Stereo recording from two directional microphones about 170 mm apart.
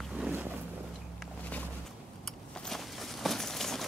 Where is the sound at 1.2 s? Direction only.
10° left (ahead or behind).